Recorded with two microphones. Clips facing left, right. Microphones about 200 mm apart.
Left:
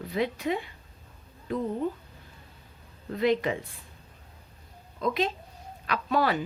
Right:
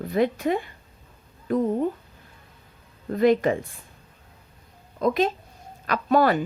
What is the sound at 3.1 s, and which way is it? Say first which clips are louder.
Speech: right 6 dB; 45° right (ahead or behind).